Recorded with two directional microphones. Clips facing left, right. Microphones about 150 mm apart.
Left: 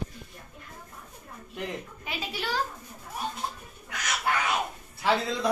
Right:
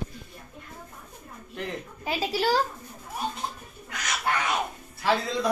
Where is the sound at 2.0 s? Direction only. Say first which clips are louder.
Right 10 dB; 35° right (ahead or behind).